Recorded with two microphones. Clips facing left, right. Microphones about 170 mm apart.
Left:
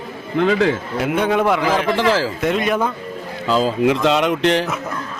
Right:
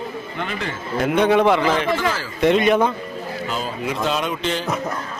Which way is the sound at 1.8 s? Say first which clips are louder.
Left 4 dB; 90° left.